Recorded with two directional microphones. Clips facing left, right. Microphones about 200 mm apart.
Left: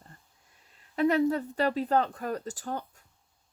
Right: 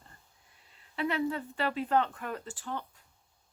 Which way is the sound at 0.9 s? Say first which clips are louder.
Left 7 dB; 40° left (ahead or behind).